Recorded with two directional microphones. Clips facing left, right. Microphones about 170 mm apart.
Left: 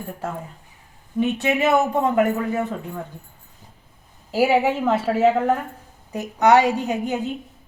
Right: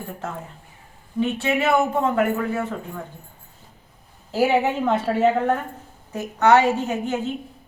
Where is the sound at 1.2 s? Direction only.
20° left (ahead or behind).